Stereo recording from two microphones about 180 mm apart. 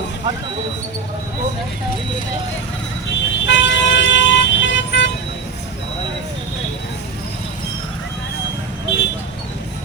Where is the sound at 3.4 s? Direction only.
90° left.